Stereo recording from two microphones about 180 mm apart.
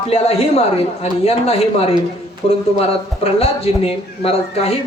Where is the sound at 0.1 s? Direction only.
30° left (ahead or behind).